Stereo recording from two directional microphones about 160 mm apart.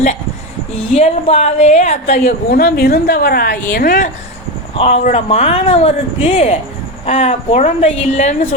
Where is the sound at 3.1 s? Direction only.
70° left (ahead or behind).